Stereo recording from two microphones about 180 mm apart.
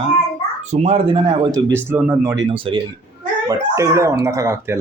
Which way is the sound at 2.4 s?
30° right (ahead or behind).